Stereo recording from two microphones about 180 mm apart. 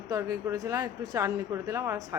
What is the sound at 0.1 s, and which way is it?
Speech, 15° right (ahead or behind).